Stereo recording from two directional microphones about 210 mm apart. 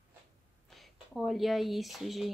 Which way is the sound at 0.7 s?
Centre (ahead or behind).